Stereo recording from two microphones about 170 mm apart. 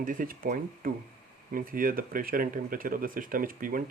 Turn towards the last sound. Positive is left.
turn(degrees=-55)  # may be behind; listen again after turning